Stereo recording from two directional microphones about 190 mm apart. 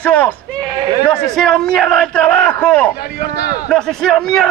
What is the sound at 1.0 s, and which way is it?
A man's voice, 5° left (ahead or behind).